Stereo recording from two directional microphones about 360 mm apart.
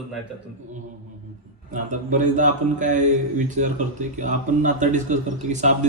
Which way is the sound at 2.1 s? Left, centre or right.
Right.